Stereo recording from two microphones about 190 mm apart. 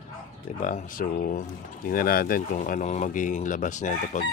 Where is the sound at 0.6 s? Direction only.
45° left (ahead or behind).